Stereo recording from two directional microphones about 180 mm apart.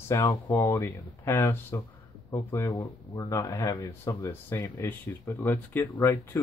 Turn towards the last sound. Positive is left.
turn(degrees=10)  # may be behind; listen again after turning